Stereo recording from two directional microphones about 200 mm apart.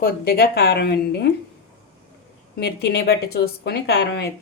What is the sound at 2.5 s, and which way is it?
A woman's voice, 55° left (ahead or behind).